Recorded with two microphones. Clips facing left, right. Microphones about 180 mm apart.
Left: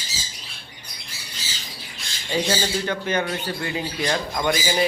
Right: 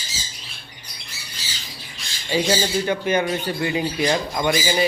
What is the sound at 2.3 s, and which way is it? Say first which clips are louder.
Speech: right 3 dB; 5° right (ahead or behind).